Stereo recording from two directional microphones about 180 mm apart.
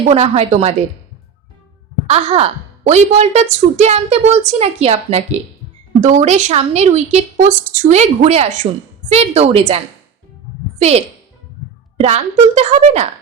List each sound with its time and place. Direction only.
0.1 s a woman's voice: 35° right (ahead or behind)
2.0 s a woman's voice: 35° right (ahead or behind)